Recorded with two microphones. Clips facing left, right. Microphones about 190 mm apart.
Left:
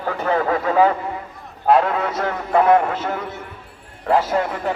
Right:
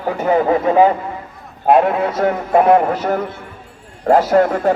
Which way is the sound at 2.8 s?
40° right (ahead or behind).